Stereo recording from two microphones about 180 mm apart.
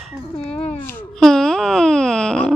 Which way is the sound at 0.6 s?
40° left (ahead or behind).